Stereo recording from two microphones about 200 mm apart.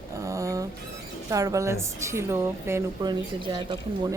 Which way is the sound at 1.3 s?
15° right (ahead or behind).